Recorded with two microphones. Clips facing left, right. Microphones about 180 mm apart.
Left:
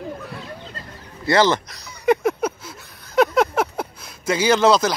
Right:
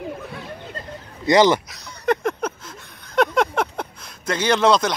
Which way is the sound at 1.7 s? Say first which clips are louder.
Left 3 dB; 5° left (ahead or behind).